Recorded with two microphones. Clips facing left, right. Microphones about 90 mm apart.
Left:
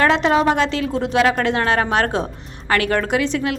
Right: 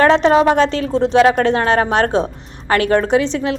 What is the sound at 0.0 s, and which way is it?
A woman's voice, 35° right (ahead or behind).